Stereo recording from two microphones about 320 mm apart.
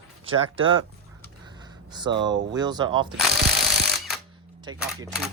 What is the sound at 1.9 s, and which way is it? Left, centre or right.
Speech, centre.